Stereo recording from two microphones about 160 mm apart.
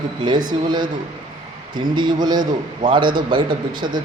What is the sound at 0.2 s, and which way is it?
A man's voice, 25° right (ahead or behind).